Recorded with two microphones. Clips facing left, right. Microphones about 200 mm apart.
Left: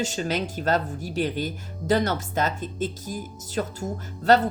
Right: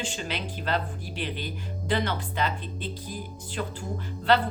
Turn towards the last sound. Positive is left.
turn(degrees=45)  # may be behind; listen again after turning